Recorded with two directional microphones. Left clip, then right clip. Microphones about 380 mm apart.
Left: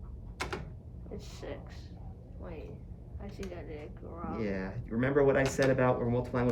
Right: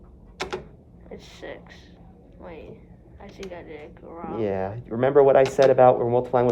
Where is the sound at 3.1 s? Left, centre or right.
Right.